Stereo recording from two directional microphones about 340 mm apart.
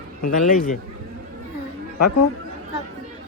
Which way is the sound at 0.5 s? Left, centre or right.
Left.